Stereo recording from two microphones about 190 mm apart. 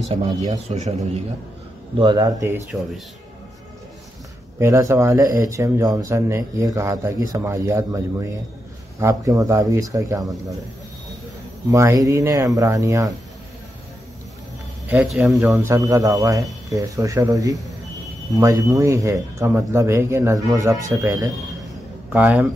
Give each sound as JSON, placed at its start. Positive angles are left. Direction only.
{"t": 0.1, "sound": "speech", "side_deg": -35}
{"t": 2.0, "sound": "a man's voice", "side_deg": -20}
{"t": 4.6, "sound": "speech", "side_deg": -15}
{"t": 9.0, "sound": "speech", "side_deg": -20}
{"t": 11.7, "sound": "speech", "side_deg": -15}
{"t": 14.9, "sound": "speech", "side_deg": -10}
{"t": 15.7, "sound": "a man's voice", "side_deg": -20}
{"t": 22.1, "sound": "speech", "side_deg": -10}